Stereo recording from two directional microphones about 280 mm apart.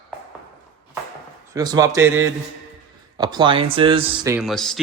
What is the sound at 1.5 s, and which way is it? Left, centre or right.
Speech, centre.